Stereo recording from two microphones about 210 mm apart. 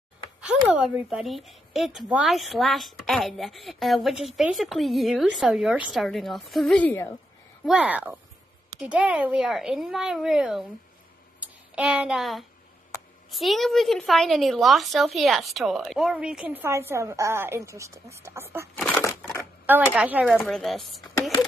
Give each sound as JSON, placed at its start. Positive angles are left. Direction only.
{"t": 0.4, "sound": "a woman's voice", "side_deg": -5}
{"t": 7.6, "sound": "a woman's voice", "side_deg": -5}
{"t": 11.3, "sound": "a sound", "side_deg": -5}
{"t": 13.3, "sound": "a woman's voice", "side_deg": 0}
{"t": 18.8, "sound": "a sound", "side_deg": 10}
{"t": 19.6, "sound": "a woman's voice", "side_deg": -10}